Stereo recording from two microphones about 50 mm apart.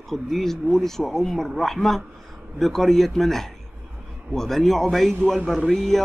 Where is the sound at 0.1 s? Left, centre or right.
Centre.